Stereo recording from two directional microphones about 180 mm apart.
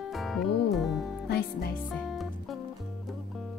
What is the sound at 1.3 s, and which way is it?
Music, 55° left (ahead or behind).